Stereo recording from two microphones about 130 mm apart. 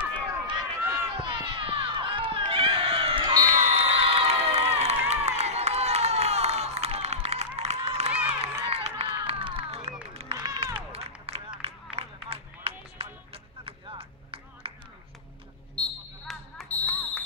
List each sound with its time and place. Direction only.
0.1 s run: 35° right (ahead or behind)
0.8 s run: 20° right (ahead or behind)
1.2 s run: 40° right (ahead or behind)
3.4 s crowd: 75° right (ahead or behind); by 8.1 s 55° right (ahead or behind)
8.3 s run: 50° right (ahead or behind)
10.9 s a sound: 50° right (ahead or behind)
11.6 s music: 50° right (ahead or behind)
15.7 s basketball bounce: 5° left (ahead or behind)
16.7 s fire alarm: 15° left (ahead or behind)